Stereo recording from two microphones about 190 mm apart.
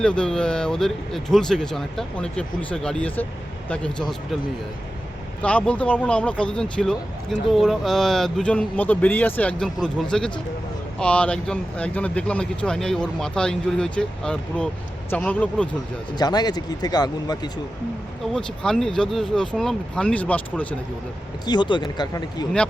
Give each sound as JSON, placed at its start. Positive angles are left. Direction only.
{"t": 0.0, "sound": "speech", "side_deg": 5}
{"t": 5.4, "sound": "speech", "side_deg": 5}
{"t": 16.1, "sound": "speech", "side_deg": 20}
{"t": 18.3, "sound": "speech", "side_deg": 5}
{"t": 21.4, "sound": "speech", "side_deg": 25}